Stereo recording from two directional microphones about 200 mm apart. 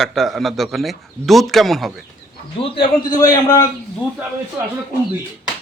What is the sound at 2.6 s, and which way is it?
A man's voice, 25° left (ahead or behind).